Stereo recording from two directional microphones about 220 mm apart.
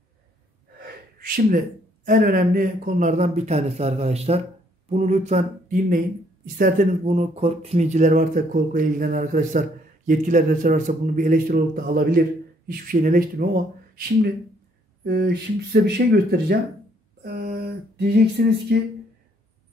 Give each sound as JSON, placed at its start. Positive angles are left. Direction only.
{"t": 0.7, "sound": "gasp", "side_deg": -45}
{"t": 2.0, "sound": "speech", "side_deg": -40}
{"t": 17.2, "sound": "a sound", "side_deg": -50}
{"t": 17.6, "sound": "speech", "side_deg": -45}